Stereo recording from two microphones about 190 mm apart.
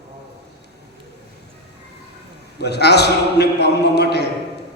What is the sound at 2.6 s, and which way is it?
A man's voice, 60° left (ahead or behind).